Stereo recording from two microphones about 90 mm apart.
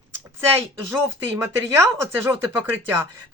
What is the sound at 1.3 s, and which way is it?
Speech, 25° right (ahead or behind).